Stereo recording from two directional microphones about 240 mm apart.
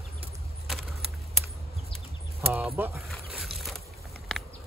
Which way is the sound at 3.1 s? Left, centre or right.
Centre.